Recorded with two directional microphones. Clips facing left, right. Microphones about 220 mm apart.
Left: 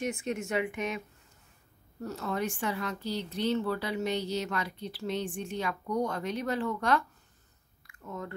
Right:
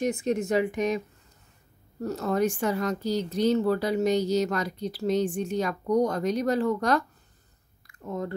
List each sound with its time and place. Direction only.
0.0 s speech: 35° right (ahead or behind)
2.0 s speech: 40° right (ahead or behind)
7.8 s a sound: 35° right (ahead or behind)